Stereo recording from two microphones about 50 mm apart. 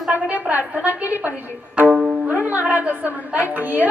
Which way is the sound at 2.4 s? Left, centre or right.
Right.